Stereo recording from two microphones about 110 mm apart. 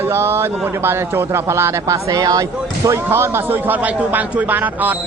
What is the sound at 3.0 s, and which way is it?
A man's voice, 20° right (ahead or behind).